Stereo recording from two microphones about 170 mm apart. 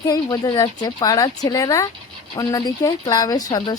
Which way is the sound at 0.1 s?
25° left (ahead or behind).